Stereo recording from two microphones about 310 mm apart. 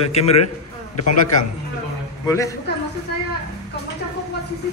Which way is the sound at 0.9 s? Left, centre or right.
Left.